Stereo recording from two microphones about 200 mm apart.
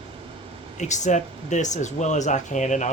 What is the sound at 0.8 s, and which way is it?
Speech, 35° left (ahead or behind).